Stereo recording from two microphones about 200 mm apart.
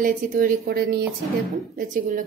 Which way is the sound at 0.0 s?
40° right (ahead or behind).